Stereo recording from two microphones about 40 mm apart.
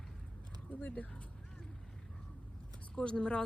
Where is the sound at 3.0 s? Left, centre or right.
Left.